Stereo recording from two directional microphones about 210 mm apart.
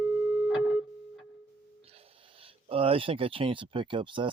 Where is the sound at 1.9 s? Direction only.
25° right (ahead or behind).